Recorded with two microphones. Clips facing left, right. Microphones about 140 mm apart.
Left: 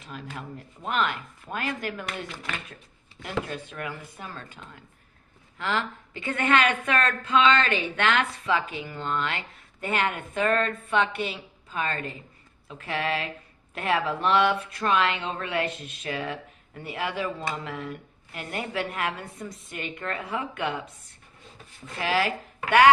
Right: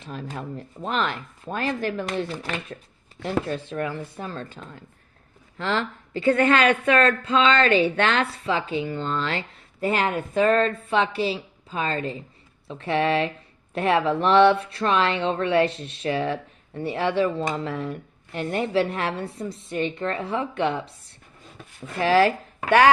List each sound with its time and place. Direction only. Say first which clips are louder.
0.0 s a woman's voice: right 5 dB; 35° right (ahead or behind)
5.5 s a woman's voice: right 3 dB; 35° right (ahead or behind)
22.0 s a woman's voice: right 8 dB; 35° right (ahead or behind)